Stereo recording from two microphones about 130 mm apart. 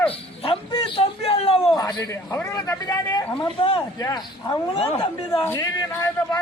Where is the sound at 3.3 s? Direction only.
40° left (ahead or behind).